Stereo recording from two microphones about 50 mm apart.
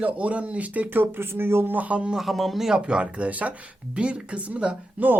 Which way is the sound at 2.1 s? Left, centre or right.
Centre.